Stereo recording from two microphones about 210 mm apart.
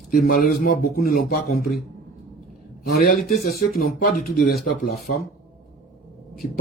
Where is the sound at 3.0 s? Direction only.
45° left (ahead or behind).